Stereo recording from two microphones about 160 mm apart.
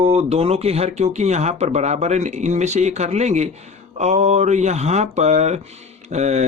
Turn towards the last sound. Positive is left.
turn(degrees=-45)  # may be behind; listen again after turning